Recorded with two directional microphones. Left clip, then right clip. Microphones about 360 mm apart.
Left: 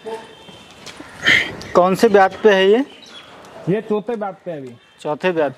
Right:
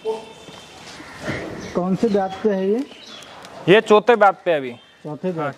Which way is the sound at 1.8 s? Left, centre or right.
Centre.